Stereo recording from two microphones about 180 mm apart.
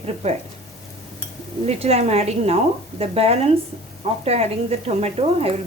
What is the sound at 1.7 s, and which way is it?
A woman's voice, 35° right (ahead or behind).